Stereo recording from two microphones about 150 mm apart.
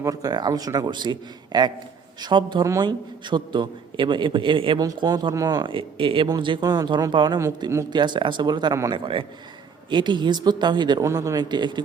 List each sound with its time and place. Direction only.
0.0 s a man's voice: 25° right (ahead or behind)
7.3 s a man's voice: 20° right (ahead or behind)